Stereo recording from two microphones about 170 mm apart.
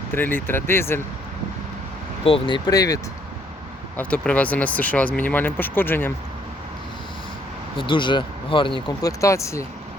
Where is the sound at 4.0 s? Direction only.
5° left (ahead or behind).